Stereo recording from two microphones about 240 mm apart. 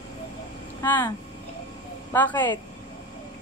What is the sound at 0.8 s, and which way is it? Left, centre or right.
Speech, centre.